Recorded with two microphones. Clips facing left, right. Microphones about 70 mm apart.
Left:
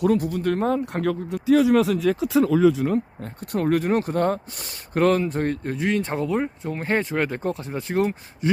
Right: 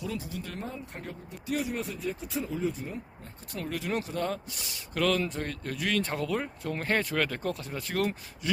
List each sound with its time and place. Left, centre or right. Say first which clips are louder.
0.0 s speech: left 15 dB; left